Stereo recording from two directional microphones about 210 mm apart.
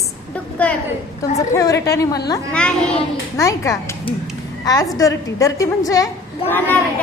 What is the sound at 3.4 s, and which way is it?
Speech, 15° left (ahead or behind).